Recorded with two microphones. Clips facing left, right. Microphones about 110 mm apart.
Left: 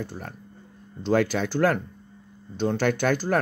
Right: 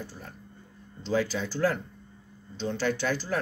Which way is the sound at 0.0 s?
60° left (ahead or behind).